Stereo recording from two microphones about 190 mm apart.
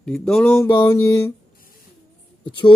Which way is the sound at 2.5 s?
25° left (ahead or behind).